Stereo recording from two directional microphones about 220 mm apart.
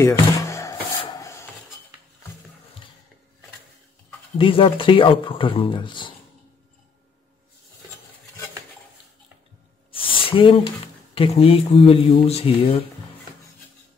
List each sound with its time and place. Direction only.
0.0 s rub: 15° left (ahead or behind)
4.4 s speech: 25° left (ahead or behind)
9.8 s a sound: 25° left (ahead or behind)
11.1 s speech: 25° left (ahead or behind)